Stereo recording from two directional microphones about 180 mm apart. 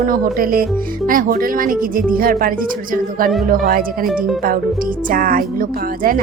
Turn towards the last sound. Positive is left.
turn(degrees=-50)  # may be behind; listen again after turning